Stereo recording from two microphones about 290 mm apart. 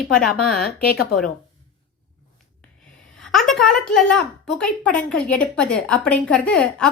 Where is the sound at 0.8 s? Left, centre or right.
Left.